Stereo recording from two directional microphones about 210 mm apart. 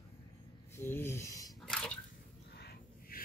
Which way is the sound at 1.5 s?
Centre (ahead or behind).